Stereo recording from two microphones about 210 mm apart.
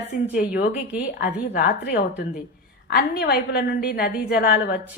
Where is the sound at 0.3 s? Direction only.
45° left (ahead or behind).